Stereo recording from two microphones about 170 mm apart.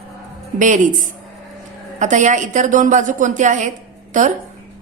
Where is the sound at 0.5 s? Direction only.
45° right (ahead or behind).